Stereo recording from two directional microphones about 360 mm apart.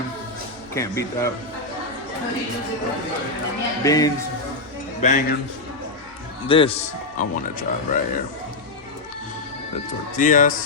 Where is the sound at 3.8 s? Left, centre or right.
Centre.